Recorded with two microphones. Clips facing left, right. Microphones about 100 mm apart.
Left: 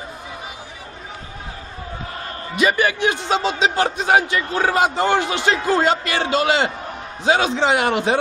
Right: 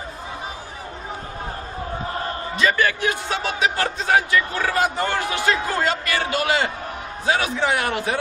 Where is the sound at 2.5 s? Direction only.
15° left (ahead or behind).